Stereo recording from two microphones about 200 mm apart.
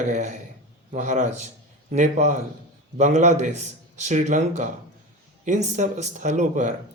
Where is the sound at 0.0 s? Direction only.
40° right (ahead or behind).